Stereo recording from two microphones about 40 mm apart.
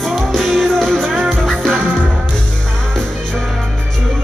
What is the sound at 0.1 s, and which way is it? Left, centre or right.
Music, centre.